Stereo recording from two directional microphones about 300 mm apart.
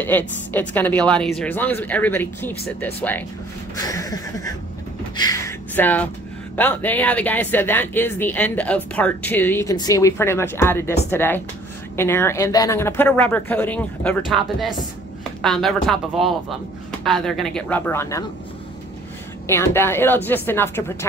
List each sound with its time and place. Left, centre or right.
0.0 s speech: centre
5.1 s a sound: centre
6.5 s speech: centre
19.4 s speech: centre